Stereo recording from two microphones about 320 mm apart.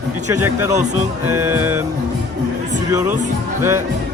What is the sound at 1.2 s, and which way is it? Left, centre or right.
Speech, centre.